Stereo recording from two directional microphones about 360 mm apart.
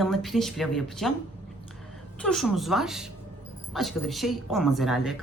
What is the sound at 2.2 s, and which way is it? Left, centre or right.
A woman's voice, centre.